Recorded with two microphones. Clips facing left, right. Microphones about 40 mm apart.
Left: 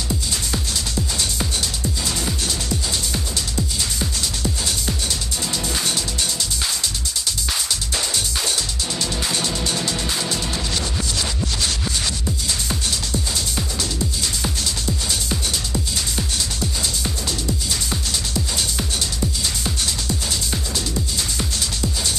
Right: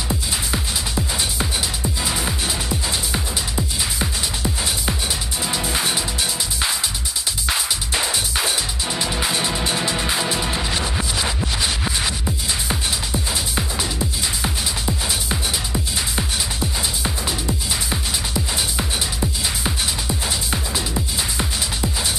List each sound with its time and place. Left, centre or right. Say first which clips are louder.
0.1 s music: right 1 dB; right
7.4 s music: right 2 dB; right